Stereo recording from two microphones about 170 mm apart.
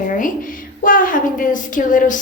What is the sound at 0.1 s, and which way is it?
A woman's voice, 50° left (ahead or behind).